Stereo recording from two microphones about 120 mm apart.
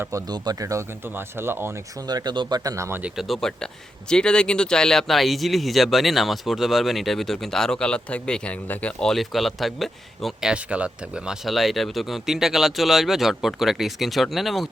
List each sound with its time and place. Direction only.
0.0 s speech: 25° right (ahead or behind)
2.0 s speech: 35° right (ahead or behind)
3.0 s speech: centre (ahead or behind)